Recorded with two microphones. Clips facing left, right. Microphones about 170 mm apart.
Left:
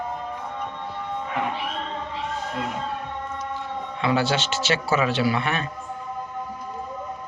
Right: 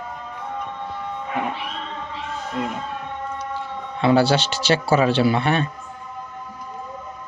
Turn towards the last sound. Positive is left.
turn(degrees=-30)  # may be behind; listen again after turning